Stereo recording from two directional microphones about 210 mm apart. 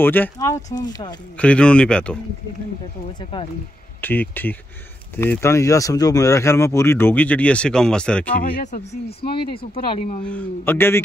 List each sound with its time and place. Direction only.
0.0 s speech: 10° left (ahead or behind)
1.4 s speech: 5° left (ahead or behind)
3.2 s speech: 25° left (ahead or behind)
4.0 s speech: 10° left (ahead or behind)
8.4 s speech: 40° left (ahead or behind)
10.2 s speech: 10° left (ahead or behind)